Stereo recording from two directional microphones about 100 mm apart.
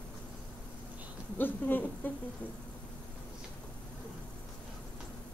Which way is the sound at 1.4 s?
20° left (ahead or behind).